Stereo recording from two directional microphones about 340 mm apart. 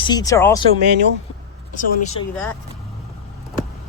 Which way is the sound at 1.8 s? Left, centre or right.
Left.